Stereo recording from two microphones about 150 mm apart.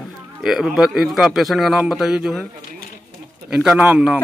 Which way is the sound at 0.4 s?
5° right (ahead or behind).